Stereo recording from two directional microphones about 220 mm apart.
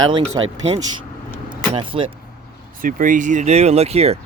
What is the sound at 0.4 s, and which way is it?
Speech, 20° right (ahead or behind).